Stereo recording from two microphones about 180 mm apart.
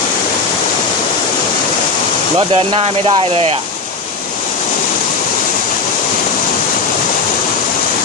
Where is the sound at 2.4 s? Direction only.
30° right (ahead or behind).